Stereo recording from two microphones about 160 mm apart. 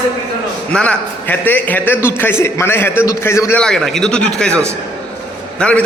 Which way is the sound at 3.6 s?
5° left (ahead or behind).